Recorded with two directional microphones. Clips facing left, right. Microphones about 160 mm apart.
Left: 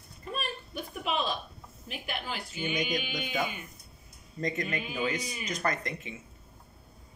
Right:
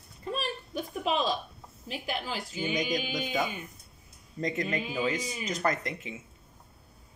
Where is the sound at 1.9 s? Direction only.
35° right (ahead or behind).